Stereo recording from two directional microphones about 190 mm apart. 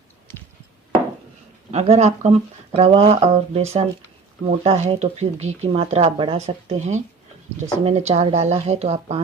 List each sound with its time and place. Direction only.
1.7 s speech: 35° right (ahead or behind)